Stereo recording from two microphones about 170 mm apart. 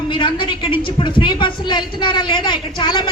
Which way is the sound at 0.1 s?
30° left (ahead or behind).